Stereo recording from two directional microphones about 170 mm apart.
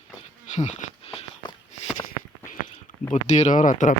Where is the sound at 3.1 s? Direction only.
40° left (ahead or behind).